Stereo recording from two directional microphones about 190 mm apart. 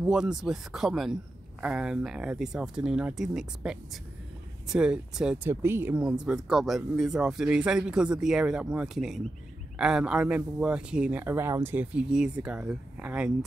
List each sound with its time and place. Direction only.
0.0 s speech: 5° right (ahead or behind)